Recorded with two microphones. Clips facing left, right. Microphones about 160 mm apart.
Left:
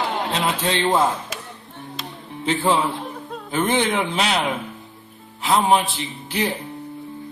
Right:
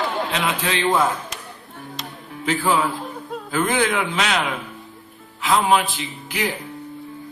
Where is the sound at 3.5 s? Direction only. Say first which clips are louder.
Even; 25° left (ahead or behind).